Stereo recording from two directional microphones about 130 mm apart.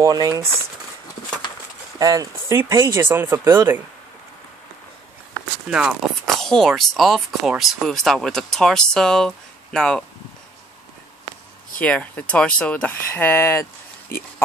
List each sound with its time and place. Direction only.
0.0 s speech: 30° right (ahead or behind)
2.0 s speech: 25° right (ahead or behind)
5.7 s speech: 5° right (ahead or behind)
11.8 s speech: 10° left (ahead or behind)